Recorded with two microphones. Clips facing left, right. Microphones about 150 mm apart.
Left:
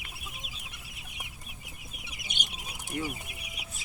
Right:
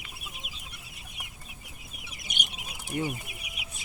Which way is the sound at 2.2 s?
25° left (ahead or behind).